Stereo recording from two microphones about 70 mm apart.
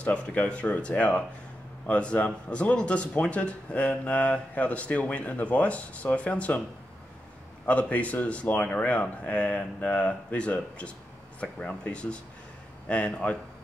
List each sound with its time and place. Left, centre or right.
0.0 s a man's voice: centre
7.6 s a man's voice: left